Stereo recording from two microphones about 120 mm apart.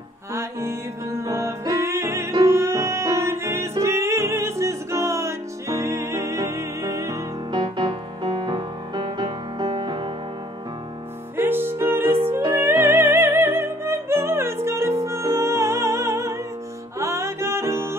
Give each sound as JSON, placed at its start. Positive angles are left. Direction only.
{"t": 0.3, "sound": "music", "side_deg": -20}
{"t": 7.5, "sound": "music", "side_deg": -40}
{"t": 11.3, "sound": "music", "side_deg": -20}